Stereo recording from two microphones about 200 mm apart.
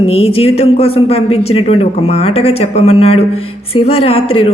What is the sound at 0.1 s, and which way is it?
A woman's voice, 30° left (ahead or behind).